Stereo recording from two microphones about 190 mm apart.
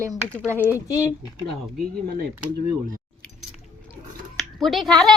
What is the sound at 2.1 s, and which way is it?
Speech, 55° right (ahead or behind).